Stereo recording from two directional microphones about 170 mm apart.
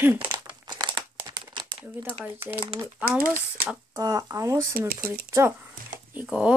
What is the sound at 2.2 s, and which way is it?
Speech, 10° right (ahead or behind).